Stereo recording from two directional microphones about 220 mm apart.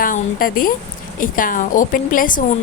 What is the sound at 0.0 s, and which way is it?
A woman's voice, 40° left (ahead or behind).